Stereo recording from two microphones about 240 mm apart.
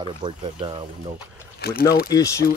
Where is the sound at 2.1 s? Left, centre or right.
Centre.